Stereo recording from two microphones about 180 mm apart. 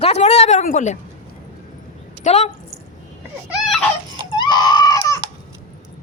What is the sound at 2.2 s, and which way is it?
Speech, 40° left (ahead or behind).